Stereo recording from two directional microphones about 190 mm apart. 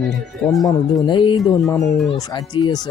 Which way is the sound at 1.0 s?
25° left (ahead or behind).